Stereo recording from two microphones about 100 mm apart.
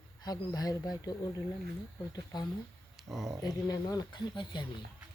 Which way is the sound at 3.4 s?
40° left (ahead or behind).